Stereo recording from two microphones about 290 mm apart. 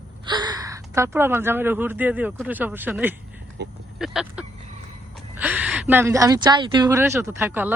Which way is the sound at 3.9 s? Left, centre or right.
Centre.